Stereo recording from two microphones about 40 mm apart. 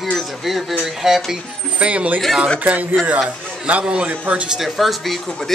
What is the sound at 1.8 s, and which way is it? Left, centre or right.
Speech, right.